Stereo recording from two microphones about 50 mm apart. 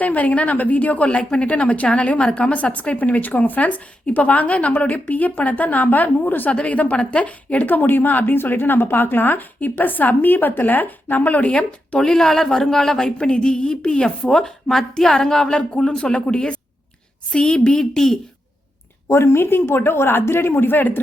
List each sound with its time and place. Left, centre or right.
0.0 s a woman's voice: left
7.7 s a woman's voice: left
11.9 s a woman's voice: centre
19.0 s a man's voice: left